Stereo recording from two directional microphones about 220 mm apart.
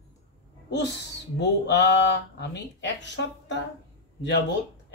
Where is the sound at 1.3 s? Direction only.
50° left (ahead or behind).